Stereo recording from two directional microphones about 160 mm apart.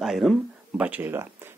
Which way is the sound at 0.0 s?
Centre (ahead or behind).